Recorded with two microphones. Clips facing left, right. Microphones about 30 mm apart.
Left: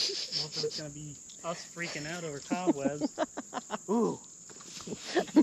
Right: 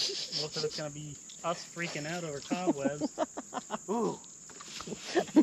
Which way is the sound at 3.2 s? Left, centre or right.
Left.